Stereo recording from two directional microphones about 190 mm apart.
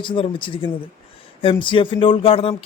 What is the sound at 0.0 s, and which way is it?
Speech, 25° left (ahead or behind).